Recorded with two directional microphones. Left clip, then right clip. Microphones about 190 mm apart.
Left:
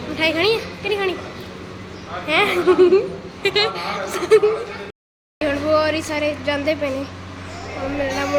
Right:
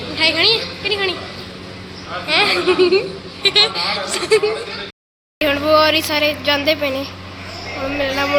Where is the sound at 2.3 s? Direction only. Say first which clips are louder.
Right 1 dB; 15° left (ahead or behind).